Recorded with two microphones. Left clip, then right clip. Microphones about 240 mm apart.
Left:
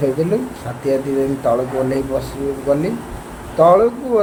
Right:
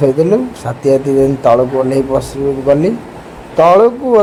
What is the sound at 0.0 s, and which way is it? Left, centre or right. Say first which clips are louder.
Speech: right 7 dB; right.